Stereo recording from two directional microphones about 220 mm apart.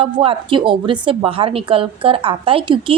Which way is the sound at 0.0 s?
25° right (ahead or behind).